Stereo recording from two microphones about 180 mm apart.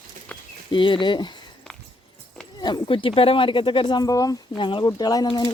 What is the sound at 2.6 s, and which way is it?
Speech, 25° left (ahead or behind).